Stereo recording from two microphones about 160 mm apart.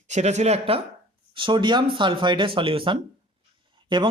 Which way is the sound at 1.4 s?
30° right (ahead or behind).